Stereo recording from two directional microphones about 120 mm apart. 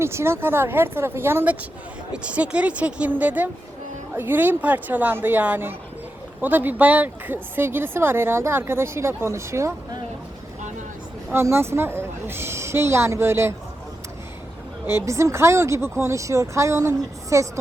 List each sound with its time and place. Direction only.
0.0 s speech: 20° right (ahead or behind)
11.3 s speech: 20° right (ahead or behind)
14.8 s speech: 25° right (ahead or behind)